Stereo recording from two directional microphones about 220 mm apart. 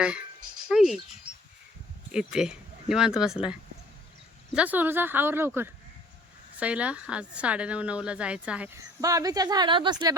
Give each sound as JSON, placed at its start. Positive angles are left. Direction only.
{"t": 0.7, "sound": "a woman's voice", "side_deg": 0}
{"t": 2.1, "sound": "a woman's voice", "side_deg": -5}
{"t": 6.6, "sound": "a woman's voice", "side_deg": -5}